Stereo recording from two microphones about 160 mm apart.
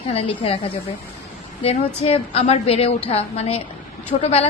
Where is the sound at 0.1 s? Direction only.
40° left (ahead or behind).